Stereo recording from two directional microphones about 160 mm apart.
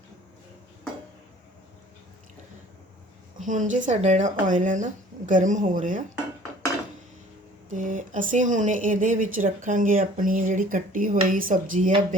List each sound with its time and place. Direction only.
3.4 s speech: 50° right (ahead or behind)
7.7 s speech: 50° right (ahead or behind)